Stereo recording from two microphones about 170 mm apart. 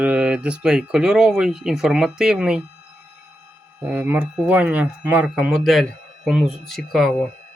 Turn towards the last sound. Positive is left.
turn(degrees=0)  # may be behind; listen again after turning